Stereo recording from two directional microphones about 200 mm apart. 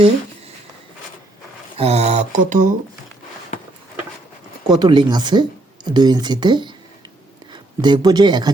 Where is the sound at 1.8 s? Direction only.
30° right (ahead or behind).